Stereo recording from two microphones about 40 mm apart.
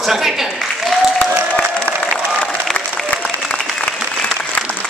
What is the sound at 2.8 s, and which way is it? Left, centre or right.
Applause, left.